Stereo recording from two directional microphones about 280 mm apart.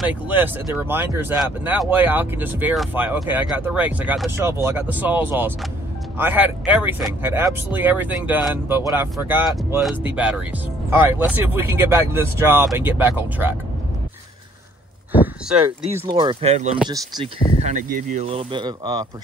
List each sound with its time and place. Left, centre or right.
0.0 s speech: centre
16.1 s speech: centre